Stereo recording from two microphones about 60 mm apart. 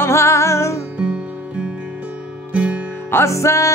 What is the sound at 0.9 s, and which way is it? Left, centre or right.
Music, centre.